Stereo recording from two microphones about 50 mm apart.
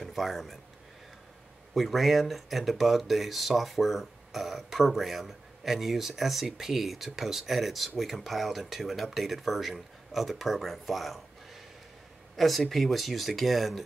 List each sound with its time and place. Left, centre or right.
0.0 s a man's voice: centre
1.7 s speech: centre
12.4 s speech: centre